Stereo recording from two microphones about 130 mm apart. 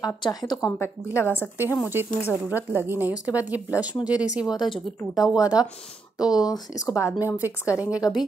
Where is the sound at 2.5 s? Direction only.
15° right (ahead or behind).